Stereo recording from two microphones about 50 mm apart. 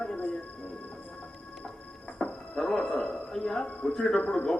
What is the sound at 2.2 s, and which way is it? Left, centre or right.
Music, centre.